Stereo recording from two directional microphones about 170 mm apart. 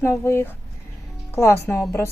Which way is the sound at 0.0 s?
15° left (ahead or behind).